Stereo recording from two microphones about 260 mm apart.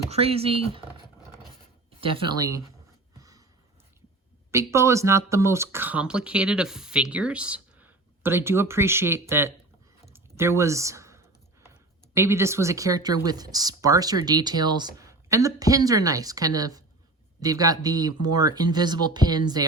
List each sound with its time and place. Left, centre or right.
0.1 s speech: right
2.0 s speech: centre
3.2 s a sound: centre
4.5 s speech: centre
10.1 s computer keyboard: centre
12.1 s speech: centre